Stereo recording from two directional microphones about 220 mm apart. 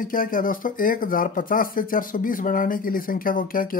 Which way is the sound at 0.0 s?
40° left (ahead or behind).